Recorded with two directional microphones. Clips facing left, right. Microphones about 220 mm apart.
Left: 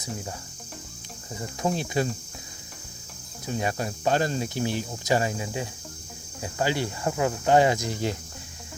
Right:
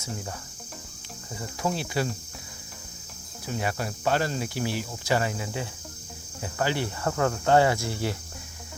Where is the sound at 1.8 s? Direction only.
20° left (ahead or behind).